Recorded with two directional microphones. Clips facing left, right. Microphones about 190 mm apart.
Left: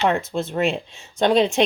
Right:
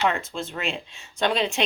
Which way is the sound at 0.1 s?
40° left (ahead or behind).